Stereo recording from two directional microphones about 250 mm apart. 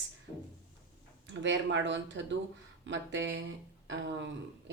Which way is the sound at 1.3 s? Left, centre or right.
Right.